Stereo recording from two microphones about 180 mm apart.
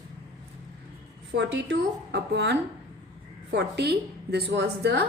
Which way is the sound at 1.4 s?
75° right (ahead or behind).